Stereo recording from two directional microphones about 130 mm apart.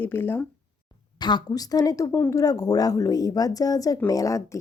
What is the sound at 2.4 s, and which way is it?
A woman's voice, 30° left (ahead or behind).